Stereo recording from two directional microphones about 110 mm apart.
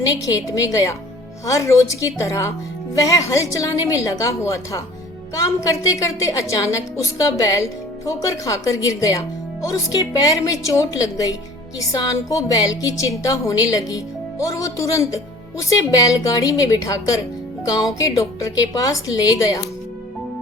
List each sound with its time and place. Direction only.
0.4 s a woman's voice: 30° left (ahead or behind)